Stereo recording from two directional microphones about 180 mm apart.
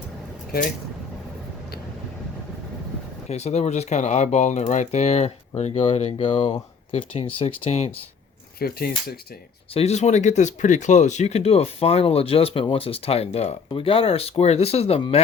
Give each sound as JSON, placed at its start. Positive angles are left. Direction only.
{"t": 3.2, "sound": "speech", "side_deg": 35}
{"t": 8.5, "sound": "speech", "side_deg": 55}
{"t": 9.7, "sound": "speech", "side_deg": 35}